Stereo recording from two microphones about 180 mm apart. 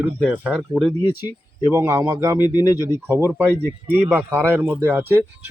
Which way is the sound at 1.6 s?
10° right (ahead or behind).